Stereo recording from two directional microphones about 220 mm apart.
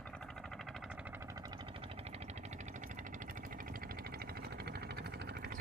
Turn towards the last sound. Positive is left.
turn(degrees=-45)  # may be behind; listen again after turning